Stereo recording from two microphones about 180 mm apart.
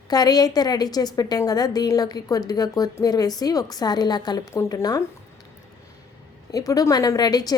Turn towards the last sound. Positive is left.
turn(degrees=20)  # may be behind; listen again after turning